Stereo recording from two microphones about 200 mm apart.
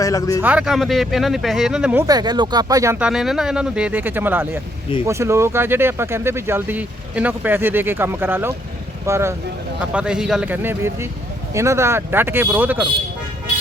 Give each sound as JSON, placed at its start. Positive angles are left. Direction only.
{"t": 0.0, "sound": "a man's voice", "side_deg": 15}
{"t": 0.4, "sound": "speech", "side_deg": -5}
{"t": 2.0, "sound": "speech", "side_deg": -20}